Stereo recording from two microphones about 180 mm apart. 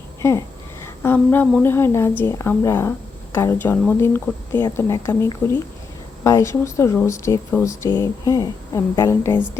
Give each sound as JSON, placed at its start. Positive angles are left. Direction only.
{"t": 0.2, "sound": "speech", "side_deg": 15}